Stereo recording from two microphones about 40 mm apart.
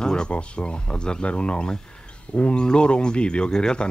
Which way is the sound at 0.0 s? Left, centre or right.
Centre.